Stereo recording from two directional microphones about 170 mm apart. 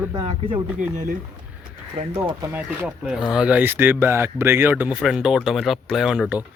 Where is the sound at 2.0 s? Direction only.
30° right (ahead or behind).